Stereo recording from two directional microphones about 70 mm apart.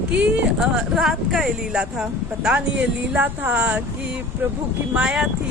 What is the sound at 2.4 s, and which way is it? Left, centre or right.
Speech, centre.